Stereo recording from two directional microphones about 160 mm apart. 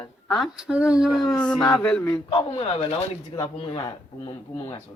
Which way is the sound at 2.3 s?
40° left (ahead or behind).